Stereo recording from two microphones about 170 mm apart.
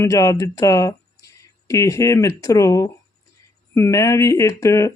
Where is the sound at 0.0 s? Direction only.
20° left (ahead or behind).